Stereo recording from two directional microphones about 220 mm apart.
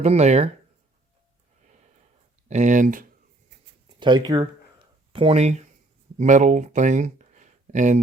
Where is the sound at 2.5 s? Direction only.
35° right (ahead or behind).